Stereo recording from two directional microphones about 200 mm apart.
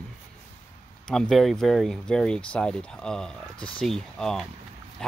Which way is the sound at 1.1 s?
Centre (ahead or behind).